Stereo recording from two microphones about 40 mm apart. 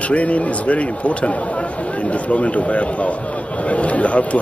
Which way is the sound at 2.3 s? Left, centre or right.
Left.